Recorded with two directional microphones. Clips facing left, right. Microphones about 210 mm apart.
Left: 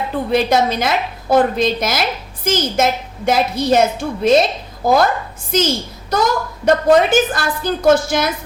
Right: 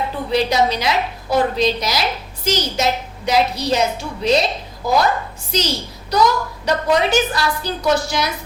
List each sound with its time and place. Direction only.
0.3 s a woman's voice: 50° left (ahead or behind)